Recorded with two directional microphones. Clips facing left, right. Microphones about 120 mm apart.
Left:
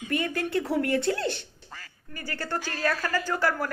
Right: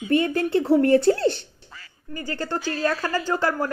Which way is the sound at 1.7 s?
45° left (ahead or behind).